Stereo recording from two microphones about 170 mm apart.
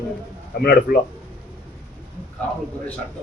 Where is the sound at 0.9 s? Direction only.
60° left (ahead or behind).